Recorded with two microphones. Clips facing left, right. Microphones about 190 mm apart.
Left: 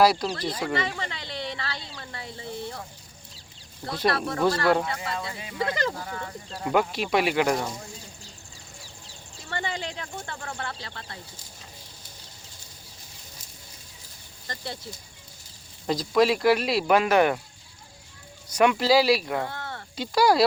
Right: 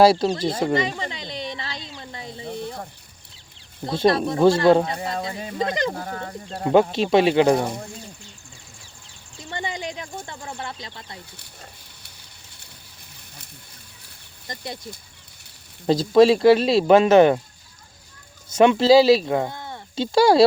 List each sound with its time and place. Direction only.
0.0 s speech: 25° right (ahead or behind)
0.7 s a sound: 20° right (ahead or behind)
3.8 s speech: 25° right (ahead or behind)
5.5 s speech: 20° right (ahead or behind)
5.9 s speech: 45° right (ahead or behind)
6.9 s speech: 25° right (ahead or behind)
7.5 s speech: 60° right (ahead or behind)
9.5 s speech: 15° right (ahead or behind)
11.3 s a sound: 65° right (ahead or behind)
14.4 s speech: 15° right (ahead or behind)
15.9 s speech: 30° right (ahead or behind)
18.4 s speech: 25° right (ahead or behind)
20.0 s speech: 25° right (ahead or behind)